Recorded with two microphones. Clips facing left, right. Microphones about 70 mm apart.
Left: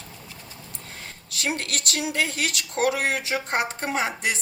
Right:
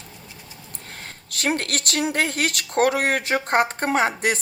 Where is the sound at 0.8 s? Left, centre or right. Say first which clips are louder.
Right 4 dB; right.